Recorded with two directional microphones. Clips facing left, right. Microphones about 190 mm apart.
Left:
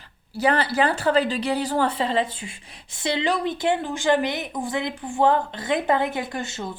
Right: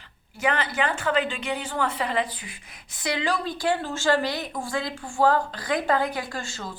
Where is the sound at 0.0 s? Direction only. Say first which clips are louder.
Left 4 dB; 35° left (ahead or behind).